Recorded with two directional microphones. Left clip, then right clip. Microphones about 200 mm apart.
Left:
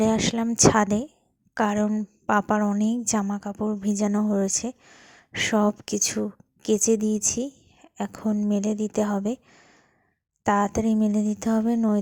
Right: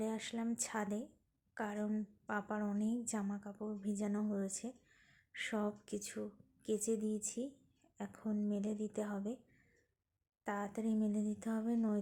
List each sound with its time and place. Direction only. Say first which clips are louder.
0.0 s a woman's voice: left 18 dB; 45° left (ahead or behind)
10.4 s speech: left 19 dB; 45° left (ahead or behind)